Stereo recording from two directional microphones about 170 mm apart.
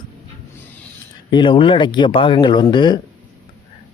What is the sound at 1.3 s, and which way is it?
Speech, 30° left (ahead or behind).